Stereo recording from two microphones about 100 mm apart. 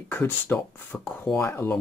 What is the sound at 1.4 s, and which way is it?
Speech, 25° left (ahead or behind).